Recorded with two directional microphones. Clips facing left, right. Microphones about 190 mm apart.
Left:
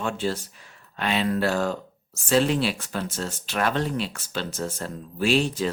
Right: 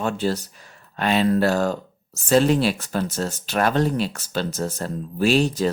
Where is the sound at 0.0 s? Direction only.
40° right (ahead or behind).